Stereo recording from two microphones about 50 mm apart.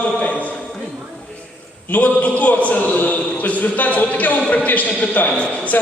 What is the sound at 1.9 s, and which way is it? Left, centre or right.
A man's voice, left.